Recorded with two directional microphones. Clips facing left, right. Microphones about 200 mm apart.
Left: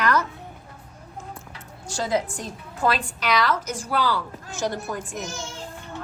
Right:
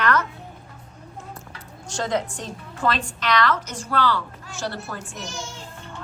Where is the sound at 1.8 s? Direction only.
10° left (ahead or behind).